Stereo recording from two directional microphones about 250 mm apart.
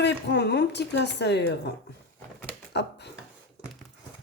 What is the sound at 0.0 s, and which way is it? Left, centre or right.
Speech, left.